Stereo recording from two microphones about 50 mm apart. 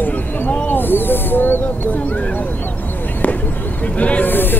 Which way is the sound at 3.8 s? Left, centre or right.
Left.